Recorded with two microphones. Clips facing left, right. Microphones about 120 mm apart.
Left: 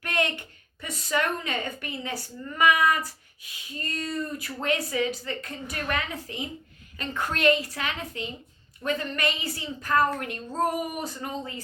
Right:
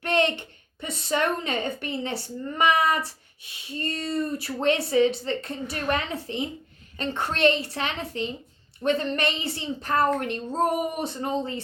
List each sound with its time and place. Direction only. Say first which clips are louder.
0.0 s a woman's voice: right 5 dB; 25° right (ahead or behind)